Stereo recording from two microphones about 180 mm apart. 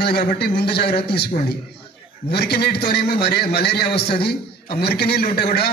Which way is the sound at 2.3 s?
65° left (ahead or behind).